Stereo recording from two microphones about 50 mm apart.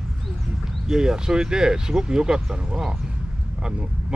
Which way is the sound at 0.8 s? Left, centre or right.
Centre.